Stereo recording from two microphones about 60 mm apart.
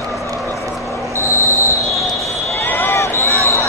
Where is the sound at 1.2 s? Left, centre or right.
Left.